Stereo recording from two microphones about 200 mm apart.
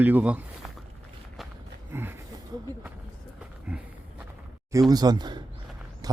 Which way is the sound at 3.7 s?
10° right (ahead or behind).